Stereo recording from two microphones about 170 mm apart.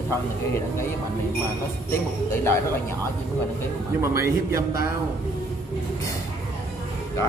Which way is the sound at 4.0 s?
15° right (ahead or behind).